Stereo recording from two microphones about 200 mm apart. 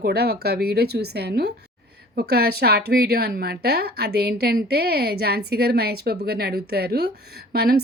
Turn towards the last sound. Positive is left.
turn(degrees=-50)  # may be behind; listen again after turning